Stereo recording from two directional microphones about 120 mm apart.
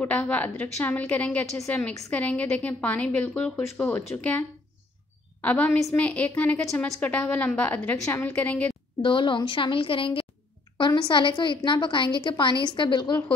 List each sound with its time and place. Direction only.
0.0 s a woman's voice: 15° left (ahead or behind)
9.0 s a woman's voice: 45° left (ahead or behind)